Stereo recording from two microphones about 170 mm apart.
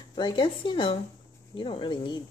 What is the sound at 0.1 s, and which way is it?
Speech, 25° left (ahead or behind).